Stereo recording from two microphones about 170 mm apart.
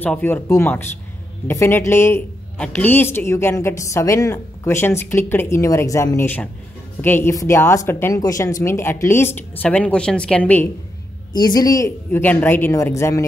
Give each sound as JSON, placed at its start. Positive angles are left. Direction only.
{"t": 0.0, "sound": "a woman's voice", "side_deg": 10}
{"t": 11.3, "sound": "a woman's voice", "side_deg": 25}